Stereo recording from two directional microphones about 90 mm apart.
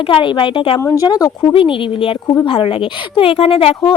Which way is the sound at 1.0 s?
45° left (ahead or behind).